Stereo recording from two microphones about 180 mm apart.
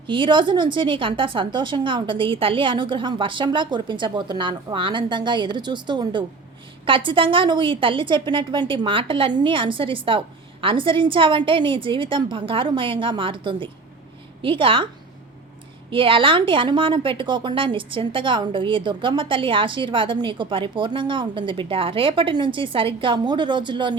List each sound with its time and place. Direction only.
0.1 s a woman's voice: 25° right (ahead or behind)
15.9 s a woman's voice: 30° right (ahead or behind)